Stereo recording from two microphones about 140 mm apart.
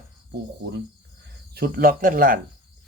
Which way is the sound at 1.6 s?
90° right.